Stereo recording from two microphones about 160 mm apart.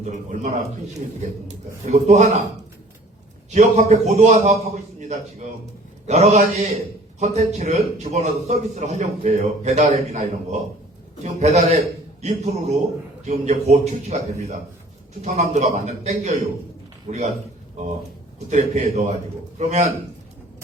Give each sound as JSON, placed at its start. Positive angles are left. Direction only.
{"t": 0.0, "sound": "a man's voice", "side_deg": -45}
{"t": 3.5, "sound": "a man's voice", "side_deg": -45}
{"t": 18.5, "sound": "a man's voice", "side_deg": -50}